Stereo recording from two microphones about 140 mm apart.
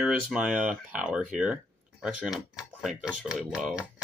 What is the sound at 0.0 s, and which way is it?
Speech, 10° right (ahead or behind).